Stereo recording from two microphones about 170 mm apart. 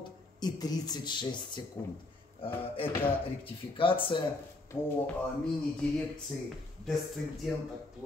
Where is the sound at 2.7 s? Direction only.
30° left (ahead or behind).